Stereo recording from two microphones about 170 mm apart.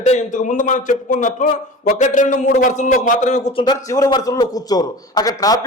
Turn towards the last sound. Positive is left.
turn(degrees=20)  # may be behind; listen again after turning